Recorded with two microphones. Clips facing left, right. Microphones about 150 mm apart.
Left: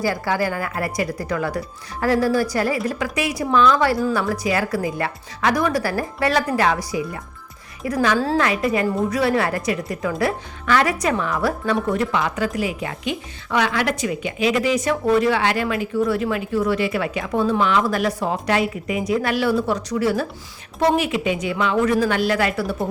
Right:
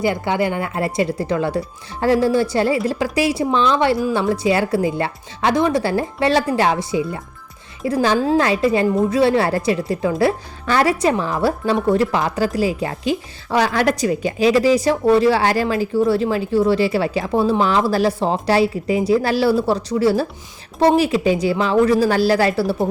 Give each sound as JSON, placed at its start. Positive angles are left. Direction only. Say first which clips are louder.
{"t": 0.0, "sound": "a woman's voice", "louder": "right 3 dB", "side_deg": -20}